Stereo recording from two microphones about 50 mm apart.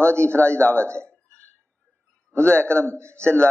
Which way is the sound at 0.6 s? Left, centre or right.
Left.